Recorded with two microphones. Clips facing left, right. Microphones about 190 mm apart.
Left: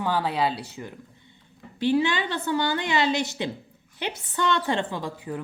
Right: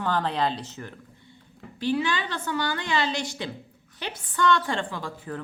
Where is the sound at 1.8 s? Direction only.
25° left (ahead or behind).